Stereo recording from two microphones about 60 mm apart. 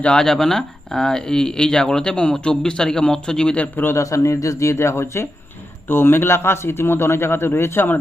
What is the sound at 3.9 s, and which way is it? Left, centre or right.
A man's voice, left.